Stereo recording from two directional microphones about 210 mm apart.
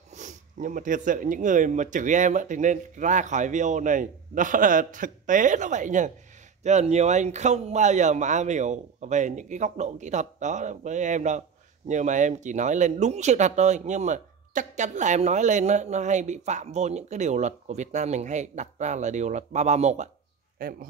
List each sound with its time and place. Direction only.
0.1 s speech: 35° right (ahead or behind)